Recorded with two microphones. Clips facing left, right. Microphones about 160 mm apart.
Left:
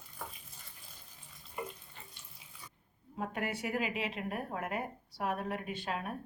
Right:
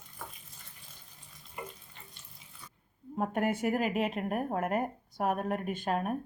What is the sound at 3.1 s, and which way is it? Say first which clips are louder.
Speech: right 7 dB; 50° right (ahead or behind).